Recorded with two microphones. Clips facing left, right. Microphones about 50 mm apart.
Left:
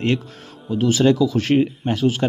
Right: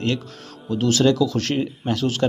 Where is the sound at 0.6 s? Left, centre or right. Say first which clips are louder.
Left 2 dB; centre.